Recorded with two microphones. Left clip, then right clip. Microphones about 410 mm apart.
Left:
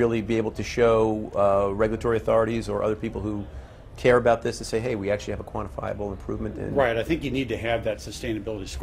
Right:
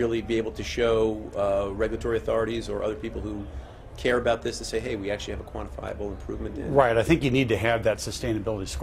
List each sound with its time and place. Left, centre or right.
0.0 s speech: left
6.8 s speech: right